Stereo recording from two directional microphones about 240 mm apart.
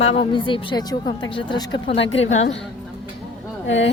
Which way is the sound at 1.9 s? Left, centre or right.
Left.